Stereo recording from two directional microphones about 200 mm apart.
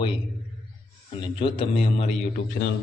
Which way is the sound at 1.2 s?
25° left (ahead or behind).